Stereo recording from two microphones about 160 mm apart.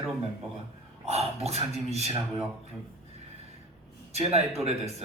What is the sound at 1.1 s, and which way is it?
A man's voice, 40° right (ahead or behind).